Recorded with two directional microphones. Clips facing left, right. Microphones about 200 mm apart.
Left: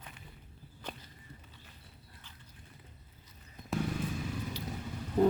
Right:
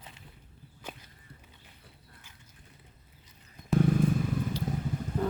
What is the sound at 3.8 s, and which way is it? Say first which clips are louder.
Vehicle: right 10 dB; 50° right (ahead or behind).